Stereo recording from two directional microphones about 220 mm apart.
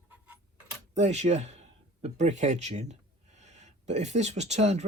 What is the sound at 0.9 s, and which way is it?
Speech, 30° right (ahead or behind).